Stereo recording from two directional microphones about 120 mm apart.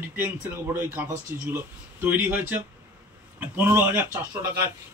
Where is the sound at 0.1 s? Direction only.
15° right (ahead or behind).